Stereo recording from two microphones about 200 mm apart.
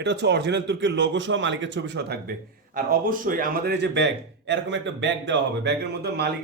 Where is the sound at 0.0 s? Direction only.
60° right (ahead or behind).